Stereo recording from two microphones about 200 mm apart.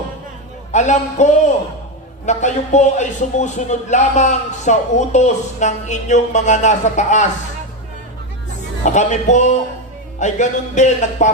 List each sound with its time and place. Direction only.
0.7 s speech: 35° left (ahead or behind)
8.8 s speech: 35° left (ahead or behind)